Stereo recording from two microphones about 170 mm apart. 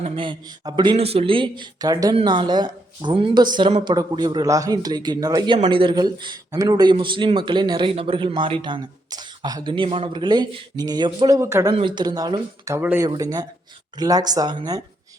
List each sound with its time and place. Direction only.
0.0 s speech: 30° right (ahead or behind)
11.7 s speech: 30° right (ahead or behind)